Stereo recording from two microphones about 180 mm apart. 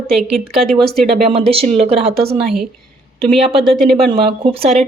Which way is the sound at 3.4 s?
Centre (ahead or behind).